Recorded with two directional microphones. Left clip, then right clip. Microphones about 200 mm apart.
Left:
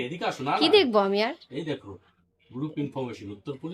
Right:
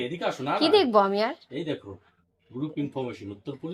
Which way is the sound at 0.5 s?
10° left (ahead or behind).